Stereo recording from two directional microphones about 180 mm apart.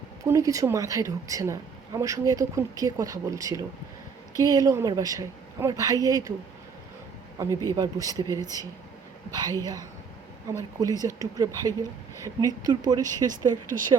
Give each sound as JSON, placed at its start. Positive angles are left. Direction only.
{"t": 0.3, "sound": "a woman's voice", "side_deg": -20}
{"t": 7.4, "sound": "a woman's voice", "side_deg": -20}